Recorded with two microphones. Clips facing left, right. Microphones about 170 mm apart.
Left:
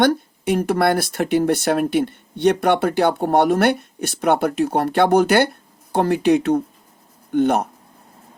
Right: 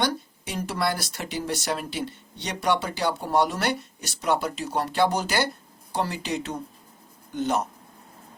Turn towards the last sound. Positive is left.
turn(degrees=60)  # may be behind; listen again after turning